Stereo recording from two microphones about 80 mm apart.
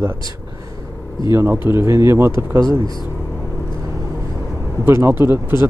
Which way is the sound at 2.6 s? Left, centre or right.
Right.